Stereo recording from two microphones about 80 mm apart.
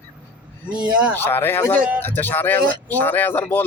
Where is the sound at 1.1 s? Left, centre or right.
Left.